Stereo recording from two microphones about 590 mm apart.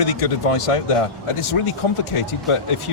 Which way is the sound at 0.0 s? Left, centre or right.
Left.